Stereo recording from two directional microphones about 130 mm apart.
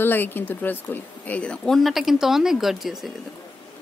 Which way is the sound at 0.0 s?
15° left (ahead or behind).